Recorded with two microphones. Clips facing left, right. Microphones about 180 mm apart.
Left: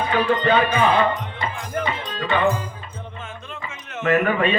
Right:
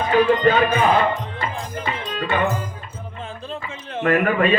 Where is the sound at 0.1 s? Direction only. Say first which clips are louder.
Right 4 dB; 40° right (ahead or behind).